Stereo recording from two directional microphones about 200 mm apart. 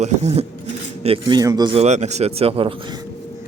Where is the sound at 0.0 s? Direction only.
35° right (ahead or behind).